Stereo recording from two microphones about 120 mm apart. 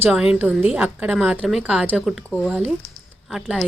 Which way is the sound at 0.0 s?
10° right (ahead or behind).